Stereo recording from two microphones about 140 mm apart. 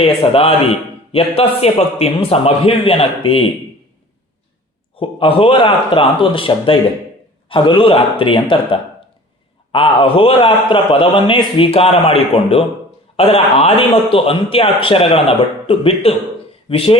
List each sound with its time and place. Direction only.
0.0 s a man's voice: 45° left (ahead or behind)
4.9 s a man's voice: 40° left (ahead or behind)